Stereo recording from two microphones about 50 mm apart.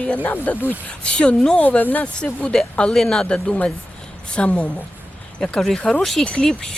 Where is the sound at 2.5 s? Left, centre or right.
Centre.